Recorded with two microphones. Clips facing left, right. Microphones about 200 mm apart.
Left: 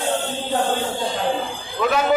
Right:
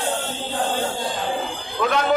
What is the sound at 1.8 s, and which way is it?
Speech, 5° left (ahead or behind).